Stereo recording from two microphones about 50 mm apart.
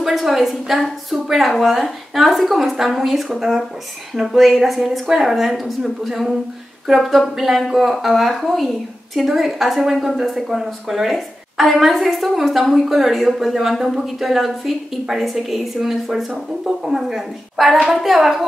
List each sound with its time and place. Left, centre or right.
0.0 s a woman's voice: centre